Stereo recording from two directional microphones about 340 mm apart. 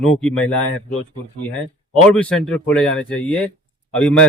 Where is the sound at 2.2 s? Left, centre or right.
Centre.